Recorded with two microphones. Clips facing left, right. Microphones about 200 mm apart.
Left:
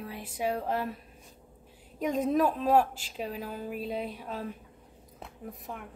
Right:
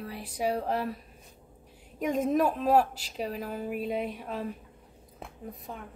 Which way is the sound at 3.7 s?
5° right (ahead or behind).